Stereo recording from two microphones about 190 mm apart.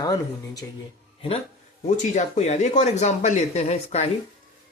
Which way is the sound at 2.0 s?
40° left (ahead or behind).